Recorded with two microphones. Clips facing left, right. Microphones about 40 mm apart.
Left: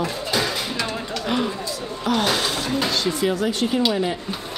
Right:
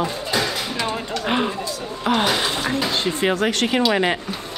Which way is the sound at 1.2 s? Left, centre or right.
Right.